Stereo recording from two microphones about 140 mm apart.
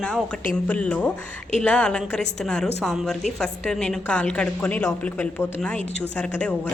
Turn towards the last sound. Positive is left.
turn(degrees=15)  # may be behind; listen again after turning